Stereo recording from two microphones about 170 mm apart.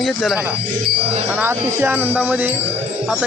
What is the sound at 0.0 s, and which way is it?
Speech, centre (ahead or behind).